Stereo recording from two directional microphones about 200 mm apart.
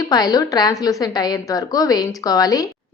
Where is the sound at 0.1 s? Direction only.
20° left (ahead or behind).